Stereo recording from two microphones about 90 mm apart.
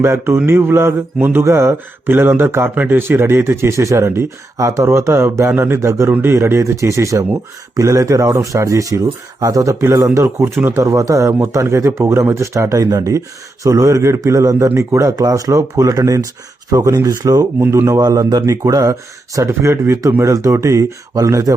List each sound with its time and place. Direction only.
0.0 s mantra: 30° right (ahead or behind)
4.5 s speech: 35° right (ahead or behind)
17.6 s speech: 30° right (ahead or behind)